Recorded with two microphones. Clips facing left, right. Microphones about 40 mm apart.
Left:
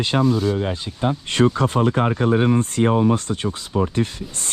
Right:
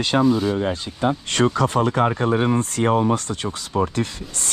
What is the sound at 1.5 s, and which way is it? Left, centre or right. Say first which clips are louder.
Speech: even; left.